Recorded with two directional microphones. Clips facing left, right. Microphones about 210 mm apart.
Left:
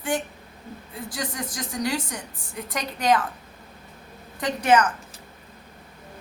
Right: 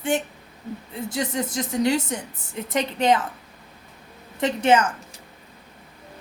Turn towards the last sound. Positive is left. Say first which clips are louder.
# right 1 dB
turn(degrees=-25)  # may be behind; listen again after turning